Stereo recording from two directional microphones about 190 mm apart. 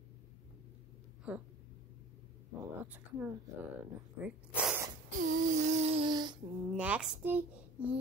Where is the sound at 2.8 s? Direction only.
10° right (ahead or behind).